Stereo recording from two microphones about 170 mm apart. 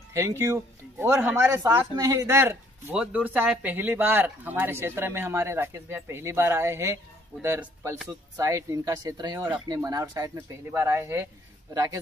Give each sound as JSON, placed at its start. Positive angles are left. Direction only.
{"t": 0.1, "sound": "speech", "side_deg": -15}